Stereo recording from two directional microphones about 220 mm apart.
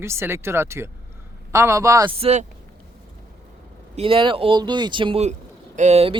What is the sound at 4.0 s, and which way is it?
Speech, 25° right (ahead or behind).